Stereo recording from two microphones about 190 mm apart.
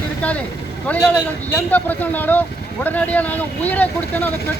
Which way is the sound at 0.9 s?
10° left (ahead or behind).